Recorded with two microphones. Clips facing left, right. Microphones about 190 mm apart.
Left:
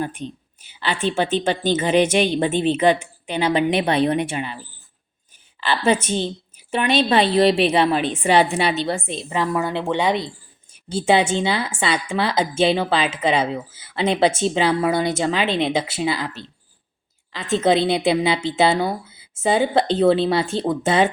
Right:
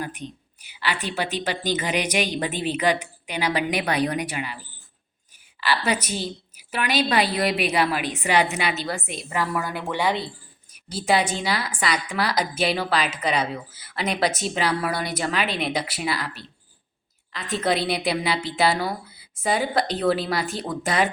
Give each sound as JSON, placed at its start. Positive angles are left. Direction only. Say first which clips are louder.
{"t": 0.0, "sound": "a woman's voice", "louder": "left 5 dB", "side_deg": 25}
{"t": 5.5, "sound": "a woman's voice", "louder": "left 5 dB", "side_deg": 25}